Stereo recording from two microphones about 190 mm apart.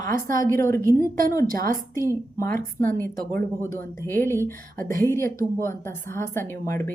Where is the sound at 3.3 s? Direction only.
15° left (ahead or behind).